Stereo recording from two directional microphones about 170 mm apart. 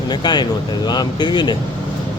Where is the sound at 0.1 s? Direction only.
25° left (ahead or behind).